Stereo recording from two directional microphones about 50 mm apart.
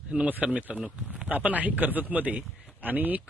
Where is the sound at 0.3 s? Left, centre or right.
Right.